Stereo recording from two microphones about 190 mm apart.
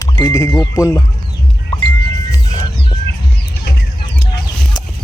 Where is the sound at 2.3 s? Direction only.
15° left (ahead or behind).